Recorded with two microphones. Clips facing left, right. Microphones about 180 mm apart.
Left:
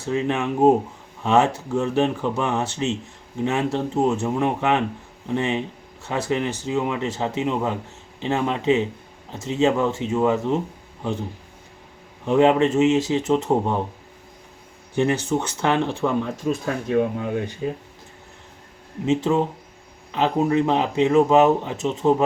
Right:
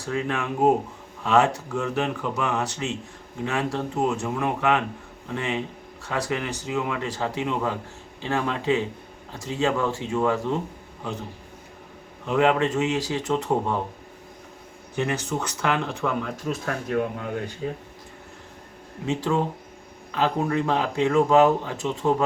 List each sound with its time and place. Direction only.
0.0 s speech: 25° left (ahead or behind)
12.2 s speech: 30° left (ahead or behind)
14.9 s speech: 30° left (ahead or behind)
19.0 s speech: 20° left (ahead or behind)